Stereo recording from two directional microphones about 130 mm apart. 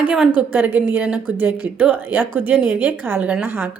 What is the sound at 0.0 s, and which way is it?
A woman's voice, 10° right (ahead or behind).